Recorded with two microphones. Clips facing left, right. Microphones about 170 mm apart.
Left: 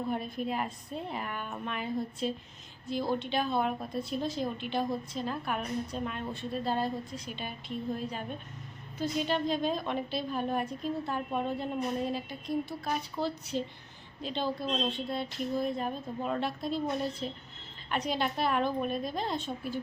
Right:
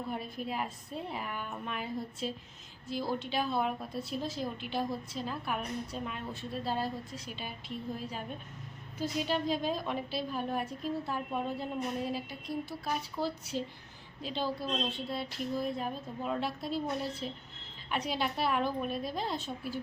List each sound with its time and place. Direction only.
0.1 s a woman's voice: 5° right (ahead or behind)
14.4 s a woman's voice: 20° left (ahead or behind)
14.8 s a woman's voice: 5° right (ahead or behind)